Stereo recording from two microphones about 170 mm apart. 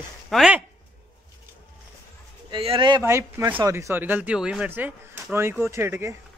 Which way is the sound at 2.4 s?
30° right (ahead or behind).